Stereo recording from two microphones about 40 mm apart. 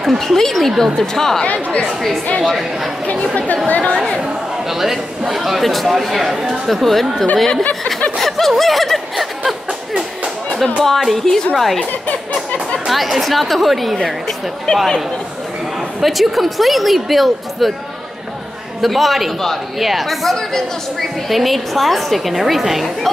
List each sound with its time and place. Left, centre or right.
0.2 s speech: centre
1.4 s speech: left
2.4 s a woman's voice: centre
3.6 s speech: left
4.6 s a woman's voice: centre
8.2 s snicker: centre
11.1 s a woman's voice: centre
12.8 s a woman's voice: centre
14.7 s a man's voice: left
16.0 s a woman's voice: centre
18.8 s a woman's voice: centre